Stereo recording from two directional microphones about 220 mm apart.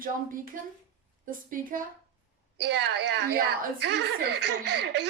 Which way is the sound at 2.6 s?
50° right (ahead or behind).